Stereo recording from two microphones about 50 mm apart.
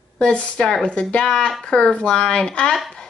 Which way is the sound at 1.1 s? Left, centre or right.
Centre.